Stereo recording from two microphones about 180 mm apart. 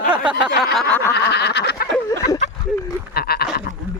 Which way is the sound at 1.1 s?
70° left (ahead or behind).